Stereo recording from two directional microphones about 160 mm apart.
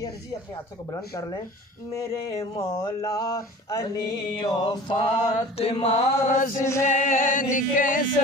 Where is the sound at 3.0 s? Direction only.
20° left (ahead or behind).